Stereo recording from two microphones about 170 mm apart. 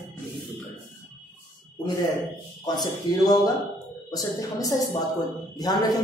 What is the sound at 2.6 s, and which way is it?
A woman's voice, 25° left (ahead or behind).